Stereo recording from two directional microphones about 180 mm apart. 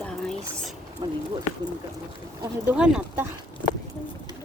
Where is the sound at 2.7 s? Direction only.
5° right (ahead or behind).